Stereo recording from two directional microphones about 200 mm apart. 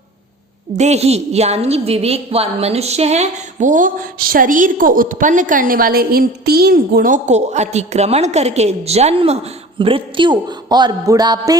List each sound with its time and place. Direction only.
0.8 s a woman's voice: 35° right (ahead or behind)